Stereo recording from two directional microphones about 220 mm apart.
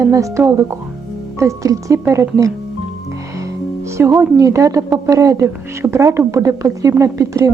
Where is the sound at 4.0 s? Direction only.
15° right (ahead or behind).